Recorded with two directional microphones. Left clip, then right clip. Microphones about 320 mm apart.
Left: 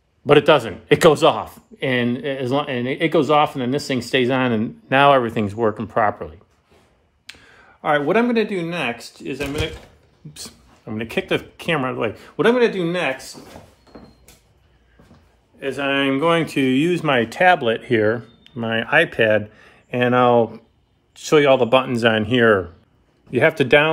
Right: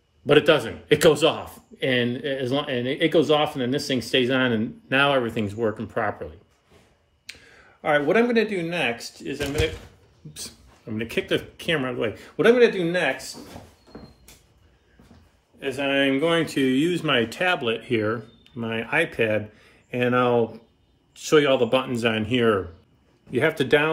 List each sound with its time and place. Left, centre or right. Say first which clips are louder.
0.3 s a man's voice: left 4 dB; centre
15.6 s speech: left 2 dB; centre